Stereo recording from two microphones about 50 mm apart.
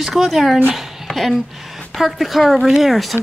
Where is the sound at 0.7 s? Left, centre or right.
Centre.